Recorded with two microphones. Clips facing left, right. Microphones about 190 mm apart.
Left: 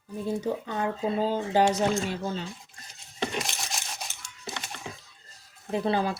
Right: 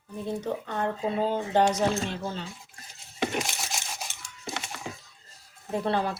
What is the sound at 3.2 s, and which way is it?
Coin, 5° right (ahead or behind).